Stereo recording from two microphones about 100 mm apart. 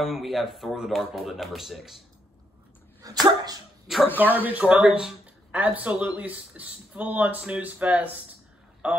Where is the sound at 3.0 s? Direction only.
40° right (ahead or behind).